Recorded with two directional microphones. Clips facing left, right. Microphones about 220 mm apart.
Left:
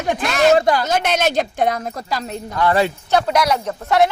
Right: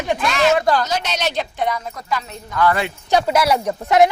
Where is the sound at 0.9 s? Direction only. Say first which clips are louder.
Left 5 dB; 50° left (ahead or behind).